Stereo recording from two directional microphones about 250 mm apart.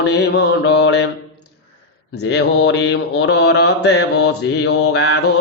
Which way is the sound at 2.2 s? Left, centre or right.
Left.